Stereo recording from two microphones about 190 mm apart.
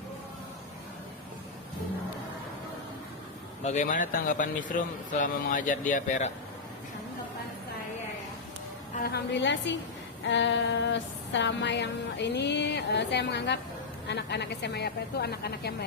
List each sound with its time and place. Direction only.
3.6 s speech: 40° left (ahead or behind)
9.0 s a woman's voice: 60° left (ahead or behind)
10.2 s a sound: 70° left (ahead or behind)